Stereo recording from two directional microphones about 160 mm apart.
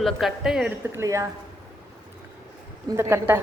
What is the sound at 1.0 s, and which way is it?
Speech, 20° right (ahead or behind).